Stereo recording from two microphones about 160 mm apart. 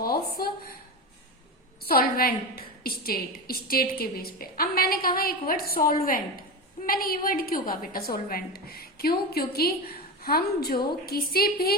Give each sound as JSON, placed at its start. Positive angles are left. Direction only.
{"t": 0.0, "sound": "a woman's voice", "side_deg": 70}
{"t": 1.9, "sound": "a woman's voice", "side_deg": 70}